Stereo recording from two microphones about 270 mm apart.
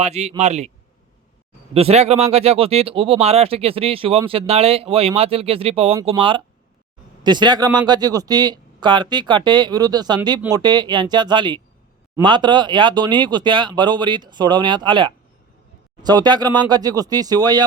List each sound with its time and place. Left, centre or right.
0.0 s speech: right
1.7 s speech: right